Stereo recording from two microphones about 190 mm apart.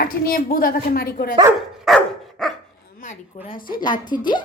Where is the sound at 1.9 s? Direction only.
Centre (ahead or behind).